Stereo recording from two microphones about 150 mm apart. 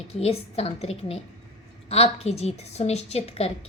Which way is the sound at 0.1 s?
45° left (ahead or behind).